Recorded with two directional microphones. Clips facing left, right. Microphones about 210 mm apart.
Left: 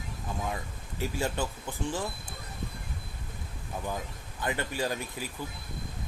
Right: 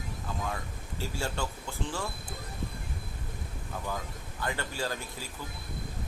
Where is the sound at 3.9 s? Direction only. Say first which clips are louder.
Left 1 dB; 20° left (ahead or behind).